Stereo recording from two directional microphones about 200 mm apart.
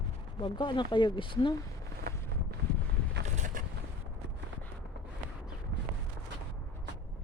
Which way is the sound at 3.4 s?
40° right (ahead or behind).